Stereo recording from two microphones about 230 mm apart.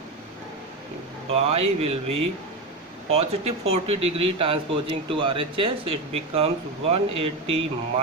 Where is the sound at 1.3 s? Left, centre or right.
Right.